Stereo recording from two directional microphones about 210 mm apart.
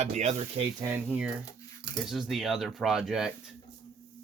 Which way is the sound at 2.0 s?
Centre (ahead or behind).